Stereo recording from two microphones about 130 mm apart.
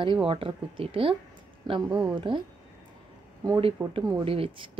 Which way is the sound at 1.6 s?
30° right (ahead or behind).